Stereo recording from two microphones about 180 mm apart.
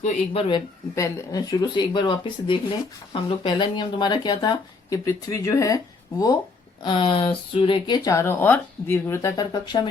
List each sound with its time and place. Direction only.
0.0 s speech: 30° left (ahead or behind)
0.9 s speech: 15° left (ahead or behind)